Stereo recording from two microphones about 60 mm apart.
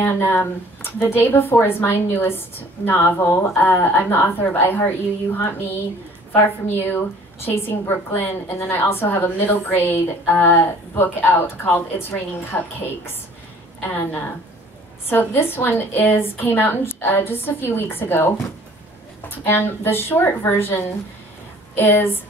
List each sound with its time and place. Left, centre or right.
0.1 s a woman's voice: left
13.7 s a woman's voice: left